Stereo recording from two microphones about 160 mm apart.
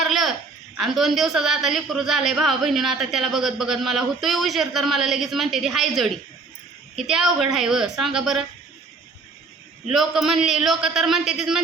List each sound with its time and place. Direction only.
0.0 s a sound: centre (ahead or behind)
0.8 s a man's voice: centre (ahead or behind)
9.9 s a man's voice: centre (ahead or behind)